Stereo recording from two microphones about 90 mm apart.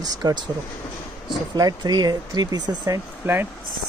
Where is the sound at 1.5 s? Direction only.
50° right (ahead or behind).